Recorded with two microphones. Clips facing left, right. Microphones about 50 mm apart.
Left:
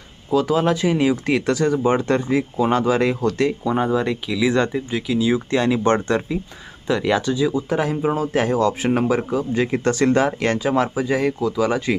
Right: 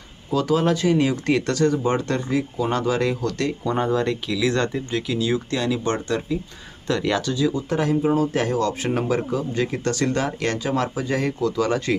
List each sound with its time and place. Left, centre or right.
0.3 s speech: centre
3.6 s speech: centre
5.5 s speech: left
6.8 s speech: centre
8.0 s speech: left
9.7 s speech: left